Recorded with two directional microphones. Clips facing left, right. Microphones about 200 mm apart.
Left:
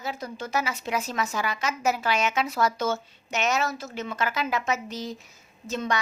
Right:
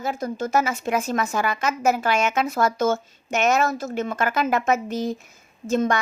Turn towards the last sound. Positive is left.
turn(degrees=-50)  # may be behind; listen again after turning